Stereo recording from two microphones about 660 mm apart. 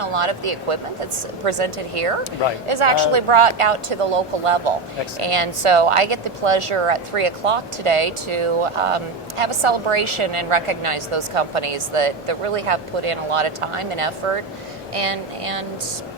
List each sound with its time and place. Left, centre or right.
0.0 s a woman's voice: right